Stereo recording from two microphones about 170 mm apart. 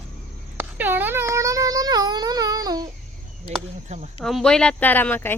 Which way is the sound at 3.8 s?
40° right (ahead or behind).